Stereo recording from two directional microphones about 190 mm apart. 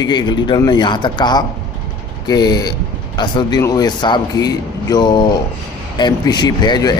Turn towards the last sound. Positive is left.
turn(degrees=20)  # may be behind; listen again after turning